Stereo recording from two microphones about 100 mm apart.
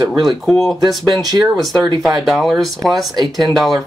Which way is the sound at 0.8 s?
40° right (ahead or behind).